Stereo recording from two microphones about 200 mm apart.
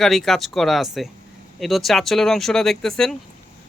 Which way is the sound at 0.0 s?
Centre (ahead or behind).